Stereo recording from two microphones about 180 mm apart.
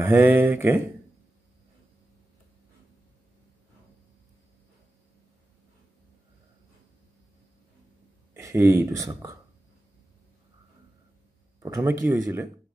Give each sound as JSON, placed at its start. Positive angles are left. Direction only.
{"t": 0.0, "sound": "speech", "side_deg": -10}
{"t": 8.4, "sound": "speech", "side_deg": -15}
{"t": 11.6, "sound": "speech", "side_deg": -15}